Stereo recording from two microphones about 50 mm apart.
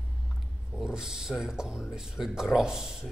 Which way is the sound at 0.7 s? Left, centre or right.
Centre.